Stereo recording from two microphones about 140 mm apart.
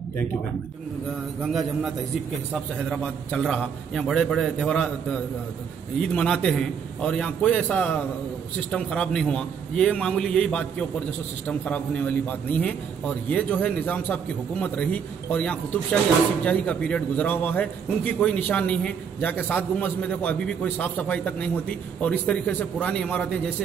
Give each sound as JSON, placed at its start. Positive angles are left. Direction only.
{"t": 2.5, "sound": "a man's voice", "side_deg": 5}